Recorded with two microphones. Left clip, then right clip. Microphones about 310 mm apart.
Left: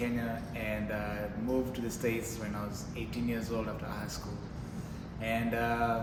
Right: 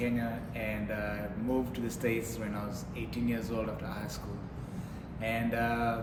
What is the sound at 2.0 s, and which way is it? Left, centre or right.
Speech, centre.